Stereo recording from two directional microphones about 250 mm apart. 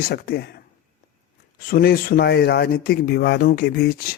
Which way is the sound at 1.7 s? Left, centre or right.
Left.